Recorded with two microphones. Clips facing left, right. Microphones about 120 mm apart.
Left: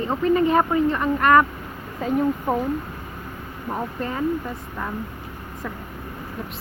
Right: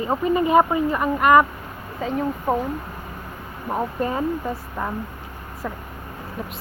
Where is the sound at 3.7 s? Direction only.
20° right (ahead or behind).